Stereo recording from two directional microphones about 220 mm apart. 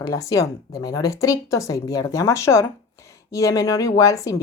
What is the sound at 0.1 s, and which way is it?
A woman's voice, 15° left (ahead or behind).